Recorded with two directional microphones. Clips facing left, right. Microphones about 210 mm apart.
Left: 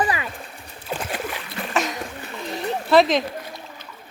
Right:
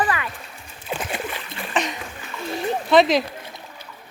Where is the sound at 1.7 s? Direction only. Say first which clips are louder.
Even; centre (ahead or behind).